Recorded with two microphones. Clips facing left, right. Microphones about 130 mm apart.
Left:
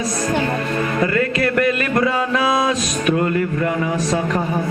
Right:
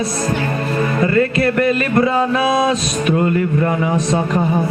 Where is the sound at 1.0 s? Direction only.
30° right (ahead or behind).